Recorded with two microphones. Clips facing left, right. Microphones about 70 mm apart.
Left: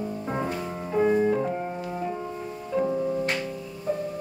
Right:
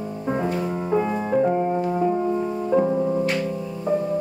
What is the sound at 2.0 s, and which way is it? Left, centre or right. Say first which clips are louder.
Music: right 10 dB; right.